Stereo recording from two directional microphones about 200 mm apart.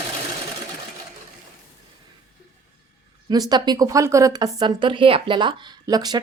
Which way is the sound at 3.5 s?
20° right (ahead or behind).